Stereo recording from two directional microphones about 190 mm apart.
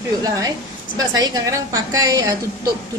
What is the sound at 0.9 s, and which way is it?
A woman's voice, 20° right (ahead or behind).